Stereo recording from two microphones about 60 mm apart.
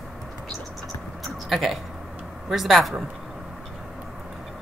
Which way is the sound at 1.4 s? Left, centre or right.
Centre.